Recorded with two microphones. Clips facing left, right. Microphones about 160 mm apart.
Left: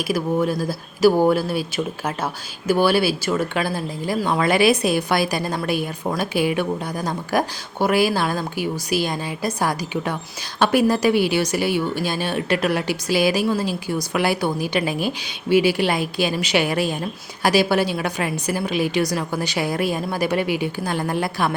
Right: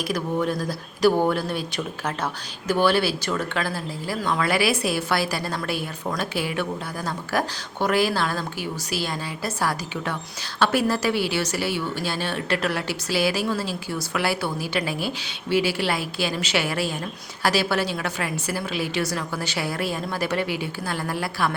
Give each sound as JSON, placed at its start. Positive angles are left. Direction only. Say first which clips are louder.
{"t": 0.4, "sound": "a woman's voice", "louder": "left 3 dB", "side_deg": 10}